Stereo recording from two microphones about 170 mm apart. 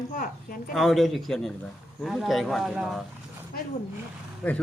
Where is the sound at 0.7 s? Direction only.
Centre (ahead or behind).